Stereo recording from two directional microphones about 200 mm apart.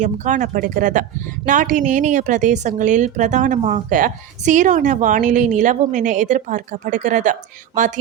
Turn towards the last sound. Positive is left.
turn(degrees=-40)  # may be behind; listen again after turning